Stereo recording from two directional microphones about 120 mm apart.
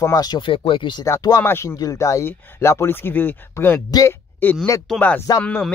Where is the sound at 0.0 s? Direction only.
30° left (ahead or behind).